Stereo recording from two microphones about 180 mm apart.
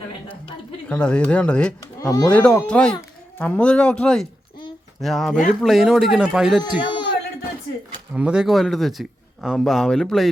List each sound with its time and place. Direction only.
0.9 s speech: 5° left (ahead or behind)
2.0 s speech: 20° left (ahead or behind)
2.6 s speech: 5° left (ahead or behind)
6.6 s speech: 25° left (ahead or behind)
8.1 s speech: 5° right (ahead or behind)